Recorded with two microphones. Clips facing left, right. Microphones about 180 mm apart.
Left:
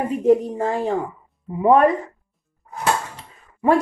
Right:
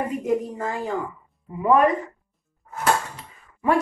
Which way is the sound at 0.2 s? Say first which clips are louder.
Left 7 dB; 30° left (ahead or behind).